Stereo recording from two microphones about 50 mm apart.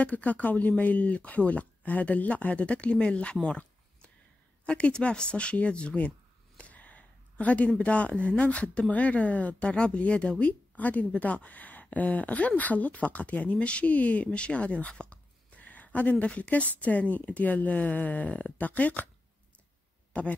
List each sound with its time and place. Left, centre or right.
0.0 s speech: left
4.6 s a woman's voice: left